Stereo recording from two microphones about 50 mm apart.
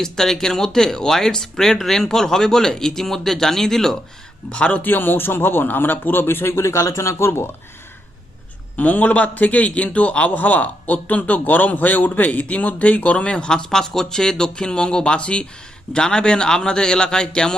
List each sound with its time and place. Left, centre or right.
0.0 s speech: centre
4.5 s a man's voice: left
4.8 s a man's voice: left
7.3 s speech: left
8.7 s a man's voice: left; by 17.5 s centre